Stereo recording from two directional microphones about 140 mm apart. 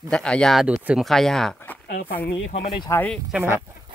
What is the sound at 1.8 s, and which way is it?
Speech, 65° left (ahead or behind).